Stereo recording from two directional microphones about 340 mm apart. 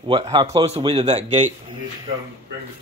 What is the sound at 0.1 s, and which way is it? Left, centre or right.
A man's voice, centre.